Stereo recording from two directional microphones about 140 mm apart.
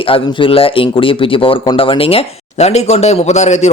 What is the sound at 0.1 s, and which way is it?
Speech, 40° left (ahead or behind).